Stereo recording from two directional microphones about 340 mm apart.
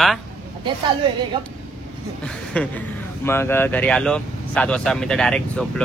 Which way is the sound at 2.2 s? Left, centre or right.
Centre.